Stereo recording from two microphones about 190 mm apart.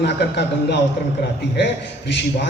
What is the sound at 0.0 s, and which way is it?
Speech, 65° left (ahead or behind).